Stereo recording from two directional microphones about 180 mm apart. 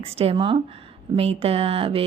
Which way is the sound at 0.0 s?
35° right (ahead or behind).